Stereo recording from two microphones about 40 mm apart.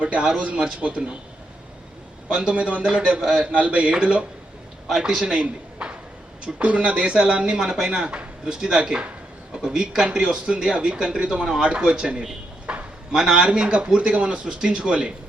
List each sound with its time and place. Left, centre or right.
0.3 s speech: right
2.3 s a man's voice: right
3.2 s speech: centre
3.4 s speech: right
5.2 s speech: right; by 8.8 s centre
8.8 s speech: right
12.7 s a sound: right
13.3 s speech: right